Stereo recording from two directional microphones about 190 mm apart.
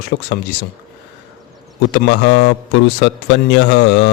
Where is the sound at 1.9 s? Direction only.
65° left (ahead or behind).